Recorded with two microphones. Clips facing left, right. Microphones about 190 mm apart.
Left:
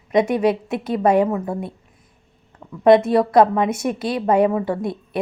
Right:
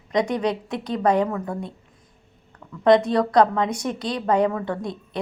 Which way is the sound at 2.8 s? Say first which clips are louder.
Left 4 dB; 25° left (ahead or behind).